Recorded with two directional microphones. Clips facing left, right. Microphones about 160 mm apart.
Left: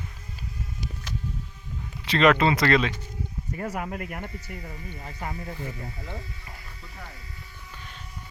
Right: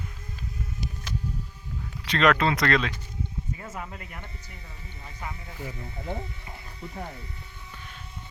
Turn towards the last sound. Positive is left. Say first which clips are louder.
# right 4 dB
turn(degrees=-20)  # may be behind; listen again after turning